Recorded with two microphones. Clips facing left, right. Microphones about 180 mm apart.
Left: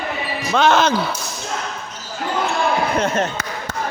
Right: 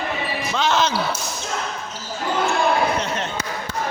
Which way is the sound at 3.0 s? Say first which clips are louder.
Left 5 dB; 50° left (ahead or behind).